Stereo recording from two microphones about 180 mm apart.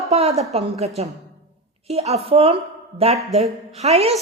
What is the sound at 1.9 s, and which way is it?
A woman's voice, 35° right (ahead or behind).